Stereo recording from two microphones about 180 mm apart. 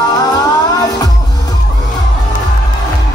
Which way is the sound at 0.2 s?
20° left (ahead or behind).